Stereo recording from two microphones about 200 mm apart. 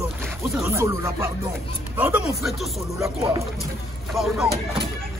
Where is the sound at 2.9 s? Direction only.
15° right (ahead or behind).